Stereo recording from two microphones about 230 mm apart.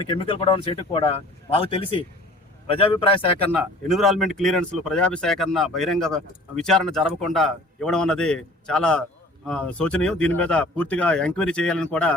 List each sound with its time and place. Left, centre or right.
0.0 s speech: left
3.6 s speech: centre